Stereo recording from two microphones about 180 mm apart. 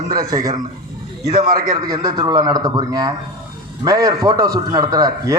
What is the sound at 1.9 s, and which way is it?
A man's voice, 20° right (ahead or behind).